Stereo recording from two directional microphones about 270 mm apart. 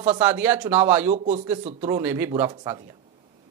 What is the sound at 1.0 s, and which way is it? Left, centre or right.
Speech, right.